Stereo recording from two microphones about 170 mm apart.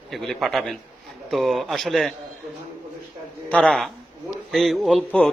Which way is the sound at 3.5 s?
5° left (ahead or behind).